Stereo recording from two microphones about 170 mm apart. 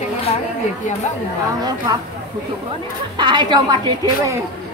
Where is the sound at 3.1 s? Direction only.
25° right (ahead or behind).